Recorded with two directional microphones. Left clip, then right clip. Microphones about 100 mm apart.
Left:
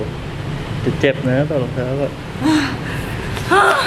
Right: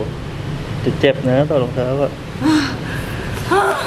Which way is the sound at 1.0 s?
20° right (ahead or behind).